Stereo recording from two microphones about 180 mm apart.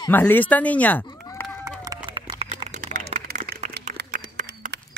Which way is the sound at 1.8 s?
20° right (ahead or behind).